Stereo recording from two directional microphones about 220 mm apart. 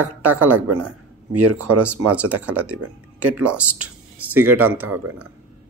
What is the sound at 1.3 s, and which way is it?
Speech, 90° right.